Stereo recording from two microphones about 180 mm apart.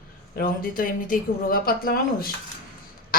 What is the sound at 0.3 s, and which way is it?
Speech, 55° left (ahead or behind).